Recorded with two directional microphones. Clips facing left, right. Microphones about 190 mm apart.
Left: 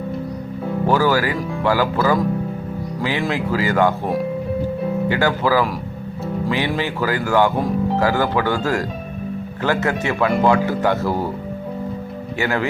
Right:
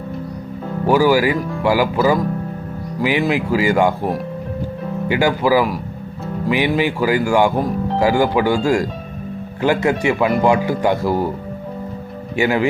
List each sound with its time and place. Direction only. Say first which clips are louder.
0.9 s speech: right 4 dB; 15° right (ahead or behind)
12.4 s speech: right 4 dB; 15° right (ahead or behind)